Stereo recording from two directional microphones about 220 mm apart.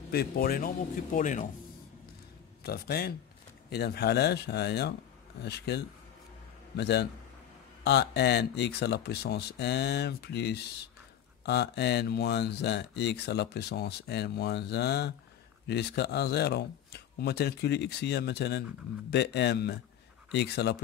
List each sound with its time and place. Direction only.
0.1 s a man's voice: 45° left (ahead or behind)
2.6 s speech: 45° left (ahead or behind)
6.8 s speech: 50° left (ahead or behind)